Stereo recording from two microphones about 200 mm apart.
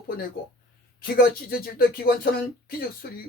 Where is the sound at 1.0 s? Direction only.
50° left (ahead or behind).